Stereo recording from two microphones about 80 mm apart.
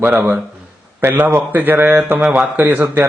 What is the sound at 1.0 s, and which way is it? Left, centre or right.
A man's voice, right.